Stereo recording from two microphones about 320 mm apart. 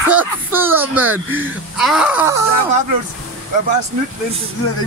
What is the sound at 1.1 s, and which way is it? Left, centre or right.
Speech, right.